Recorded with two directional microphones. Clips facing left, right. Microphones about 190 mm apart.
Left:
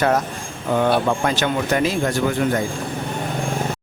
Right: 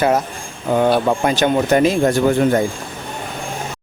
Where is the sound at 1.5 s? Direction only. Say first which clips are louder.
Right 6 dB; 30° right (ahead or behind).